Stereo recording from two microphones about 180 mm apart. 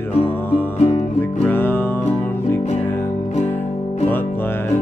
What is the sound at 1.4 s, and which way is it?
Music, 10° left (ahead or behind).